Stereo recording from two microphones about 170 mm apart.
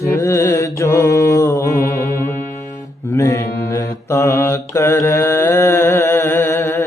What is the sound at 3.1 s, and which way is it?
Mantra, 20° left (ahead or behind).